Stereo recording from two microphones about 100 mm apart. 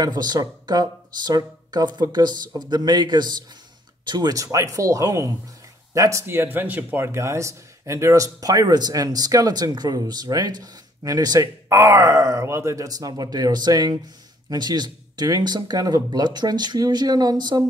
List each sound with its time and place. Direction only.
0.0 s a man's voice: 45° right (ahead or behind)
11.7 s a man's voice: 30° right (ahead or behind)